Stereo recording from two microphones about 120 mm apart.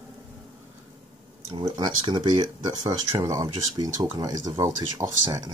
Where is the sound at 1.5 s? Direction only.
35° right (ahead or behind).